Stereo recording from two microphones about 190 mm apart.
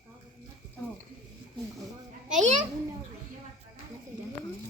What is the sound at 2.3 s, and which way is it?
Speech, 40° right (ahead or behind).